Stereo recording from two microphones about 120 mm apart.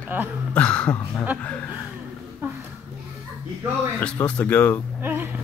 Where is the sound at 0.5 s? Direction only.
10° left (ahead or behind).